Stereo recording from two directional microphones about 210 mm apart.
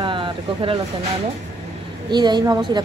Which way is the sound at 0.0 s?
25° right (ahead or behind).